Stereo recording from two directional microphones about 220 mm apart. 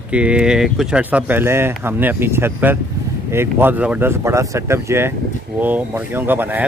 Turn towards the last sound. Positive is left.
turn(degrees=-10)  # may be behind; listen again after turning